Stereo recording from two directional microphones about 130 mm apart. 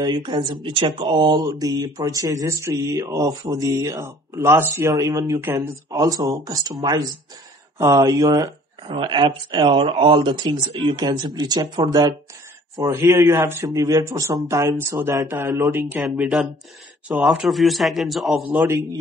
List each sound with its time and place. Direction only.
0.0 s speech: 35° right (ahead or behind); by 5.8 s 15° right (ahead or behind)
5.9 s speech: 25° right (ahead or behind)
12.7 s speech: 20° right (ahead or behind)
16.2 s a man's voice: 5° right (ahead or behind)